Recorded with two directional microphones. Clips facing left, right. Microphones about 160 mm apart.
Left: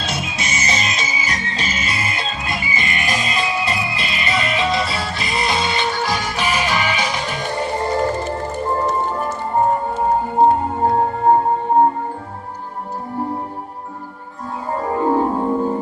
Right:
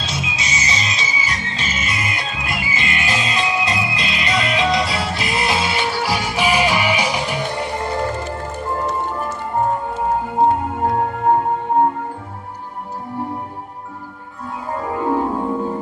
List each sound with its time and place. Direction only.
0.0 s music: 55° left (ahead or behind); by 7.7 s 10° right (ahead or behind)
7.8 s music: 35° left (ahead or behind)
10.4 s music: 30° left (ahead or behind)
14.8 s music: 35° left (ahead or behind); by 15.6 s 15° left (ahead or behind)